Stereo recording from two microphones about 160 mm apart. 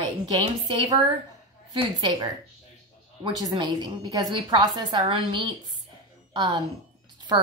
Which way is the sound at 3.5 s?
25° right (ahead or behind).